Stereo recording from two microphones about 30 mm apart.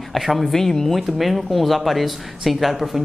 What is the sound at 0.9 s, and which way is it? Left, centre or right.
Speech, centre.